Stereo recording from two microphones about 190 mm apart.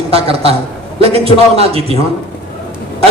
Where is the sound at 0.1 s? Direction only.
30° right (ahead or behind).